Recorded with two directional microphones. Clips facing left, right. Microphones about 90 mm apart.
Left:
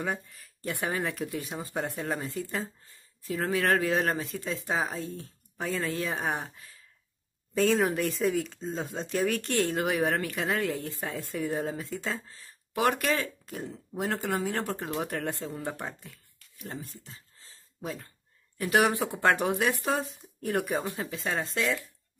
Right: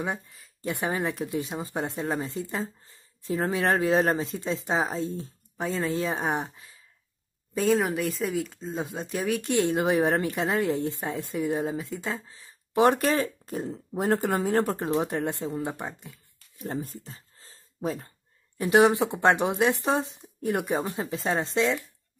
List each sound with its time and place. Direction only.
0.0 s speech: 20° right (ahead or behind)
7.5 s speech: 5° right (ahead or behind)
12.8 s speech: 30° right (ahead or behind)
16.5 s a sound: 35° right (ahead or behind)
18.6 s speech: 20° right (ahead or behind)